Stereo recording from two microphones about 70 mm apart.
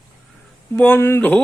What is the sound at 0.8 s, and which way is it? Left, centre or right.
Speech, left.